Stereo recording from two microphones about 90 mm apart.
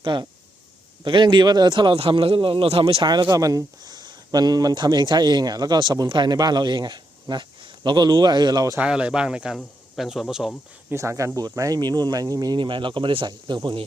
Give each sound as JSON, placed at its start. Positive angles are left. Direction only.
{"t": 0.0, "sound": "a man's voice", "side_deg": -60}
{"t": 3.3, "sound": "speech", "side_deg": -40}
{"t": 8.8, "sound": "a man's voice", "side_deg": -10}
{"t": 10.9, "sound": "speech", "side_deg": -35}
{"t": 12.5, "sound": "a man's voice", "side_deg": -65}